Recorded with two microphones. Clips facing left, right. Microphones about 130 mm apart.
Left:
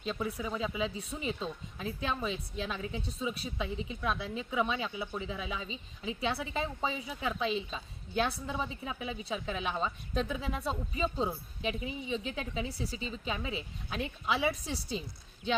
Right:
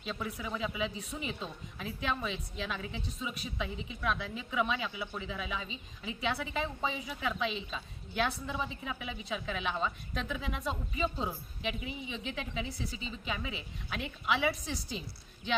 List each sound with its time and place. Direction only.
0.0 s a woman's voice: 30° left (ahead or behind)